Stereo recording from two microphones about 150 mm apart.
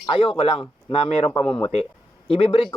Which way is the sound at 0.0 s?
35° left (ahead or behind).